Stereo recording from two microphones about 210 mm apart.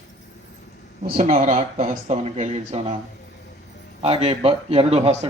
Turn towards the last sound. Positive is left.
turn(degrees=-30)  # may be behind; listen again after turning